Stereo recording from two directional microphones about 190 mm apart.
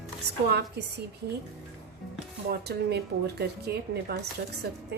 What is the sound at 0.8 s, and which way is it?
Speech, 60° right (ahead or behind).